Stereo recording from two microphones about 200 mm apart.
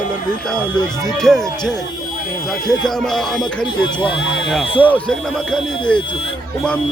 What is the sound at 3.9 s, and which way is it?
Speech, 25° left (ahead or behind).